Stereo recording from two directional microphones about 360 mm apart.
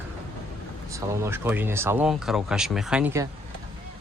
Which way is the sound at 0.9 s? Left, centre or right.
Centre.